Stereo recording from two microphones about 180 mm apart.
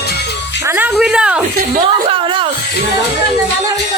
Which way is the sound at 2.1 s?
25° right (ahead or behind).